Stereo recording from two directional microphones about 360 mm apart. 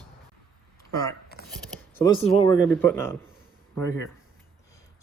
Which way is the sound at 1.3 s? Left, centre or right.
Left.